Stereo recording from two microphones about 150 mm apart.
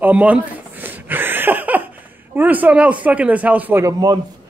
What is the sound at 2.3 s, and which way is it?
A man's voice, 10° right (ahead or behind).